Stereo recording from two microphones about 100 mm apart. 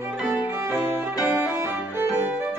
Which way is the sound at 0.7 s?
25° right (ahead or behind).